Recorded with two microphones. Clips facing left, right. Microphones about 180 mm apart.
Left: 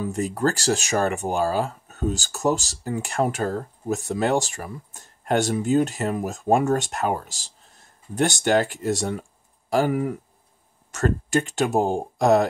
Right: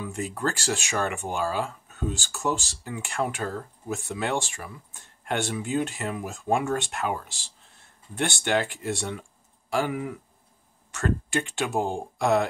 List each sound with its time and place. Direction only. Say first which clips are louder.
0.0 s speech: left 6 dB; 40° left (ahead or behind)